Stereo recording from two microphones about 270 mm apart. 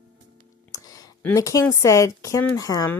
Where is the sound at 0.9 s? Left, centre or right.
Centre.